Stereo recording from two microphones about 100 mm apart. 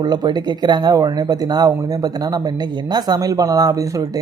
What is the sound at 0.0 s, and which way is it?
Speech, 45° right (ahead or behind).